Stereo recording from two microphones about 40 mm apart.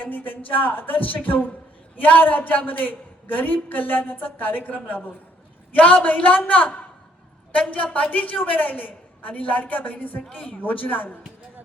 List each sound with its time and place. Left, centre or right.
0.0 s a woman's voice: left
5.7 s a woman's voice: left
7.5 s a woman's voice: left